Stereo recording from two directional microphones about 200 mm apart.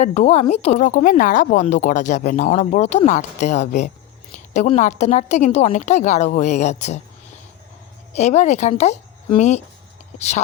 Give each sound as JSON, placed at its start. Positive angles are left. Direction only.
{"t": 0.0, "sound": "speech", "side_deg": 35}
{"t": 8.1, "sound": "speech", "side_deg": 35}